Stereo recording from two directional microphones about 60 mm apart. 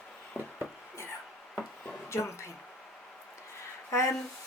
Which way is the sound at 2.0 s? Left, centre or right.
Left.